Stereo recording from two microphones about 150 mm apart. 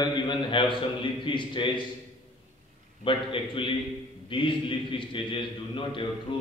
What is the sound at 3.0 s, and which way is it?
A man's voice, 35° left (ahead or behind).